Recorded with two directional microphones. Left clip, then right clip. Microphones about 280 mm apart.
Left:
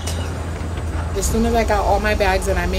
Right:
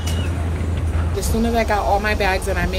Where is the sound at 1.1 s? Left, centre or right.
Centre.